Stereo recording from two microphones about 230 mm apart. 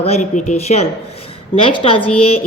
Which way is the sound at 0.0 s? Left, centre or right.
Left.